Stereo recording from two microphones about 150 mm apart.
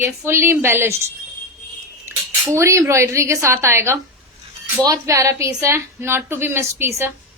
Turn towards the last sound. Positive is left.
turn(degrees=-15)  # may be behind; listen again after turning